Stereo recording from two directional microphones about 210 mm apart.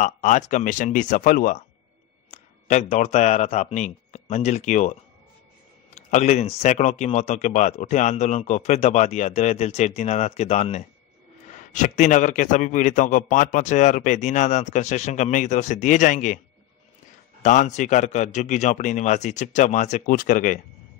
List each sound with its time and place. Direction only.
0.0 s a man's voice: 35° left (ahead or behind)
5.9 s a man's voice: 30° left (ahead or behind)
17.4 s a man's voice: 35° left (ahead or behind)